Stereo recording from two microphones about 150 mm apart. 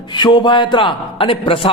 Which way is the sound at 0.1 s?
30° left (ahead or behind).